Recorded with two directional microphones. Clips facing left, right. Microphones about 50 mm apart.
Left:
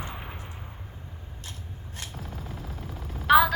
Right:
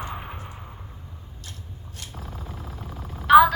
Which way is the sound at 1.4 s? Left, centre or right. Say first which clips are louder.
Even; left.